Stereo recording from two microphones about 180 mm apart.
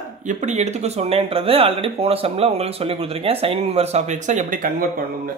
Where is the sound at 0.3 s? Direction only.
40° right (ahead or behind).